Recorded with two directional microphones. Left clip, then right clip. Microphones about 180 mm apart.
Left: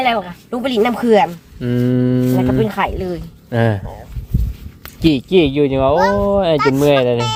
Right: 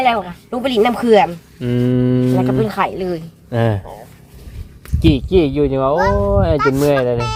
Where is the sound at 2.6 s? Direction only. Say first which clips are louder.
Right 1 dB; 10° right (ahead or behind).